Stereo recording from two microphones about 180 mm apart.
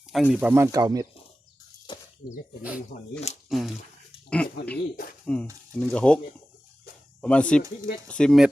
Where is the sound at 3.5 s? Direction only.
Centre (ahead or behind).